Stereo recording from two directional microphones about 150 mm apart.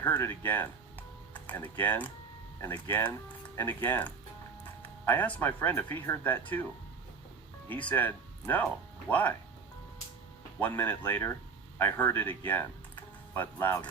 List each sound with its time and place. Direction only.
0.0 s speech: 15° left (ahead or behind)
7.7 s speech: 10° left (ahead or behind)
10.6 s speech: 10° left (ahead or behind)
12.5 s typing: 15° left (ahead or behind)